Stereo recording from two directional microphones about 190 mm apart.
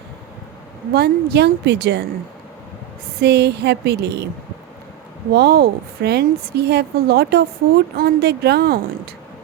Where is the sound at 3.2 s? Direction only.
60° right (ahead or behind).